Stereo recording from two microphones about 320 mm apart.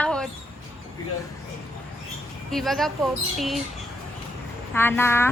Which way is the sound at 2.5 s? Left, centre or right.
Centre.